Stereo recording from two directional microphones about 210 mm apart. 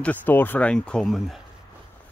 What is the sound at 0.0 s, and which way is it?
Speech, 10° left (ahead or behind).